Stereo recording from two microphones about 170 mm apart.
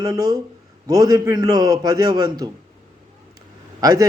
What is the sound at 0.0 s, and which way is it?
Speech, 25° right (ahead or behind).